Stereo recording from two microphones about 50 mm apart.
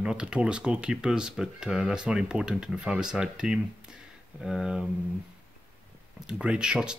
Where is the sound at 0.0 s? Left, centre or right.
Centre.